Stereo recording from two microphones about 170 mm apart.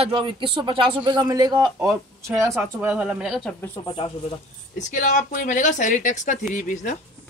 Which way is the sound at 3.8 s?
30° left (ahead or behind).